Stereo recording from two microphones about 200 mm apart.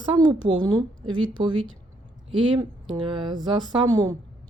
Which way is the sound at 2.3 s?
25° right (ahead or behind).